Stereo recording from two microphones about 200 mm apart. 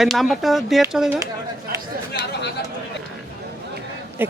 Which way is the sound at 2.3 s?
60° left (ahead or behind).